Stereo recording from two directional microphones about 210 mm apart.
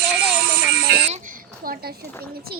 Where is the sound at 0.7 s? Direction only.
50° right (ahead or behind).